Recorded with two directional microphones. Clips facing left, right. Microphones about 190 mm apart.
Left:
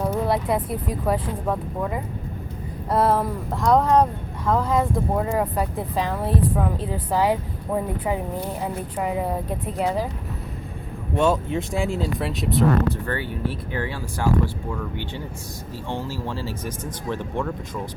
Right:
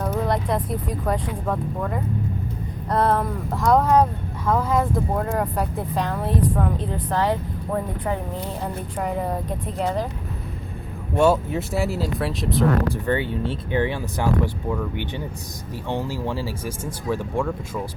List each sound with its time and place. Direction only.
0.0 s speech: 5° left (ahead or behind)
11.1 s speech: 10° right (ahead or behind)
12.9 s speech: 20° right (ahead or behind)
15.9 s speech: 15° right (ahead or behind)